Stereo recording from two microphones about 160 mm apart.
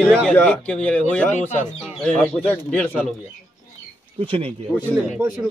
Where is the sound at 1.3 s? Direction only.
45° left (ahead or behind).